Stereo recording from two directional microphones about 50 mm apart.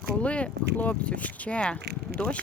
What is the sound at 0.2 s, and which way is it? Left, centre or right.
Speech, left.